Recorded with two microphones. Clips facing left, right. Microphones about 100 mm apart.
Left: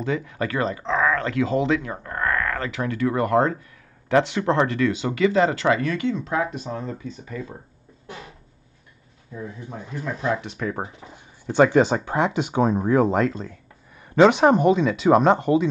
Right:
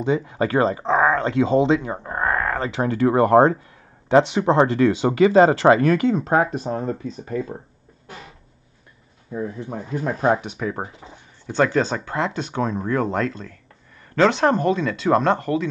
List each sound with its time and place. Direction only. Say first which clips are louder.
0.0 s speech: right 4 dB; 25° right (ahead or behind)
5.8 s speech: right 6 dB; 45° right (ahead or behind)
9.7 s speech: right 2 dB; 45° right (ahead or behind)
11.5 s speech: left 3 dB; 15° left (ahead or behind)